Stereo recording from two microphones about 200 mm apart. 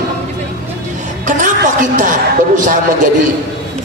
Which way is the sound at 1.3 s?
40° right (ahead or behind).